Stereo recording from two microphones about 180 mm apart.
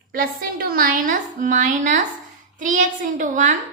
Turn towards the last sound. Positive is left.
turn(degrees=-45)  # may be behind; listen again after turning